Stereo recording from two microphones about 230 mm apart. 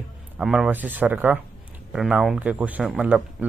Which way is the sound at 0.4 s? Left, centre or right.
Centre.